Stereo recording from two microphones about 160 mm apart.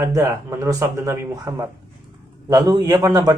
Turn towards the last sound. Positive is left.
turn(degrees=-25)  # may be behind; listen again after turning